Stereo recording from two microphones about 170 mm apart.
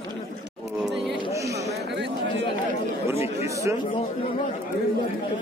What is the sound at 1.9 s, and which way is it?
Chatter, 90° right.